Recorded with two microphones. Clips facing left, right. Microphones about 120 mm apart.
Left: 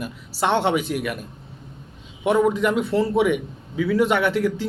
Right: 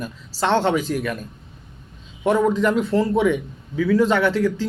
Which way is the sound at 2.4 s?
15° left (ahead or behind).